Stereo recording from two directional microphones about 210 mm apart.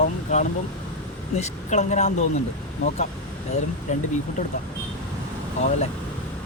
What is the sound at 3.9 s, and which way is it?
Speech, 35° left (ahead or behind).